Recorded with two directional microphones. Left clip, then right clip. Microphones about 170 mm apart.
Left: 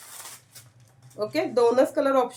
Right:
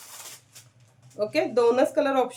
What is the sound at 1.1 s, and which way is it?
A woman's voice, 15° right (ahead or behind).